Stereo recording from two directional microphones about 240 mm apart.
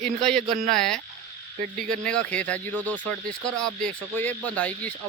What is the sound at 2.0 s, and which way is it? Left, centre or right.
Speech, centre.